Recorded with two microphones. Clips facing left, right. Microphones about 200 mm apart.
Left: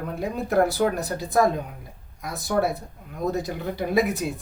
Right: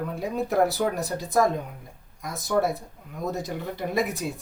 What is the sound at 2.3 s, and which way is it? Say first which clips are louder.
Speech: left 1 dB; 65° left (ahead or behind).